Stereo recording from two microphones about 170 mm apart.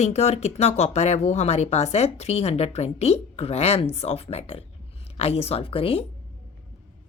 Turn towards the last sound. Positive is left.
turn(degrees=35)  # may be behind; listen again after turning